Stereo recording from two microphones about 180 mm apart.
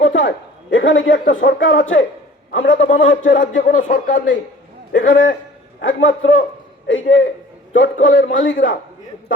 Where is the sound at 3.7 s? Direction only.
45° left (ahead or behind).